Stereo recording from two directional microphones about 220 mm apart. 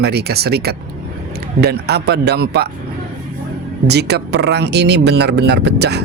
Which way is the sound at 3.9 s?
50° right (ahead or behind).